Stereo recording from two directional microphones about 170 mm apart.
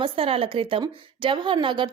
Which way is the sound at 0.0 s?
35° right (ahead or behind).